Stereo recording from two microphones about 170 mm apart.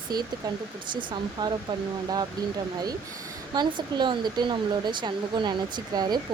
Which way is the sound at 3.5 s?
25° right (ahead or behind).